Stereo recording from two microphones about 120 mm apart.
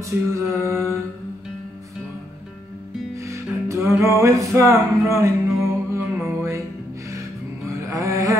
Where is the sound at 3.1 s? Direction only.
25° right (ahead or behind).